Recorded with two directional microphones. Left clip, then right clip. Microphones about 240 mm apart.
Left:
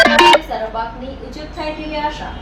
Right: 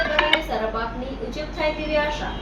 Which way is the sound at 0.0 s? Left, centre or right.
Left.